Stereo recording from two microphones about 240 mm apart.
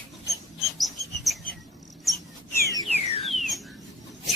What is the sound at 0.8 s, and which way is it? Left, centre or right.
Bird, centre.